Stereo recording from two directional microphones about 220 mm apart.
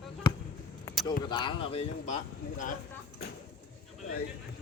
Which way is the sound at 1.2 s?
20° left (ahead or behind).